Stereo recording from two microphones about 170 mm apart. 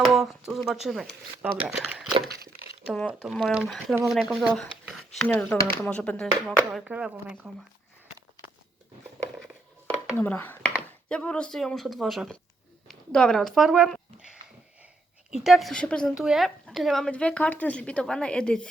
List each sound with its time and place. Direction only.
0.0 s a woman's voice: centre (ahead or behind)
2.3 s a sound: 65° right (ahead or behind)
2.8 s a woman's voice: 5° left (ahead or behind)
6.7 s a woman's voice: 5° right (ahead or behind)
10.2 s a woman's voice: 10° left (ahead or behind)
15.3 s a woman's voice: centre (ahead or behind)